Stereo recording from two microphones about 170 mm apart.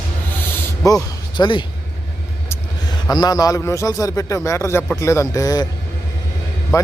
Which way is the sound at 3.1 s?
25° left (ahead or behind).